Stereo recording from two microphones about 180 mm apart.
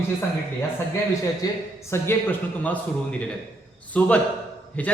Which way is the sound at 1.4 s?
20° left (ahead or behind).